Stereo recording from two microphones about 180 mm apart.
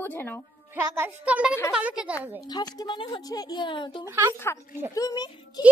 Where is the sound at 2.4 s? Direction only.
20° left (ahead or behind).